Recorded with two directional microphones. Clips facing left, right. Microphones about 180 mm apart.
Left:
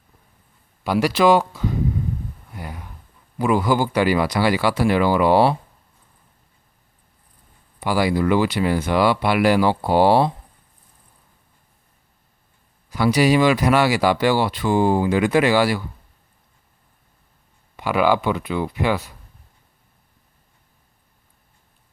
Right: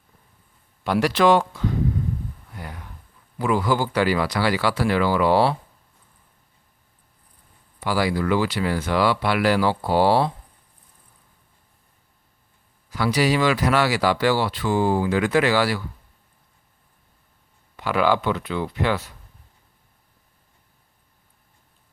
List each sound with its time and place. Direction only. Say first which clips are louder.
0.9 s speech: left 2 dB; 5° left (ahead or behind)
2.6 s a sound: left 3 dB; 10° left (ahead or behind)
3.3 s speech: left 3 dB; 15° left (ahead or behind)
7.8 s speech: left 3 dB; 15° left (ahead or behind)
12.9 s speech: left 4 dB; 15° left (ahead or behind)
17.7 s speech: left 2 dB; 10° left (ahead or behind)